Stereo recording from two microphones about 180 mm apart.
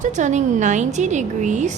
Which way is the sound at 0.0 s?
40° right (ahead or behind).